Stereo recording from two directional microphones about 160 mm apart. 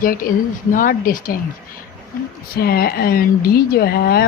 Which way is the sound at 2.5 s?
70° left (ahead or behind).